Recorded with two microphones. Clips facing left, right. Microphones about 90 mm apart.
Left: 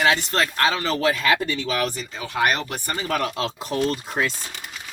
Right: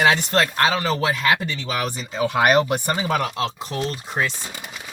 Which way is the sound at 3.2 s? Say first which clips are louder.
Right 1 dB; centre (ahead or behind).